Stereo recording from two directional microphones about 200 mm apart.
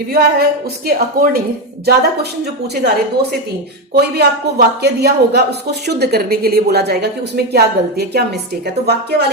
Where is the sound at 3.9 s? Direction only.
55° right (ahead or behind).